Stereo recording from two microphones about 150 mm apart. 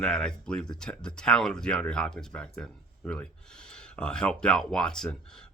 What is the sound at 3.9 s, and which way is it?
Speech, 5° left (ahead or behind).